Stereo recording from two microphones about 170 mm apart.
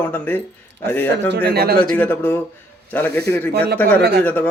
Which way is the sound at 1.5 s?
70° right (ahead or behind).